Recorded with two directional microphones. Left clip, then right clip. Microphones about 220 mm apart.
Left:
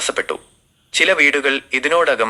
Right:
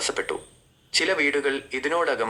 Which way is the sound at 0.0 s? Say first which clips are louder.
Left 6 dB; 15° left (ahead or behind).